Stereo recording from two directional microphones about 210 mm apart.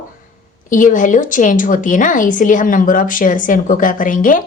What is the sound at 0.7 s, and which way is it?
A woman's voice, 40° left (ahead or behind).